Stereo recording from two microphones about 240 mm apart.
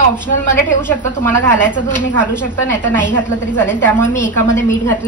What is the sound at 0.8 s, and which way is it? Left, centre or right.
Speech, centre.